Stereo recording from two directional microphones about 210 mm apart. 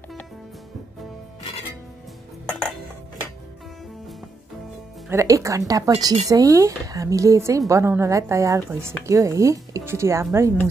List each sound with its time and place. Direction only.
5.1 s speech: 15° right (ahead or behind)